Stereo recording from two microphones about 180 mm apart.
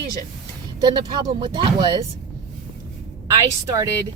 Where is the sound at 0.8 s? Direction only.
20° right (ahead or behind).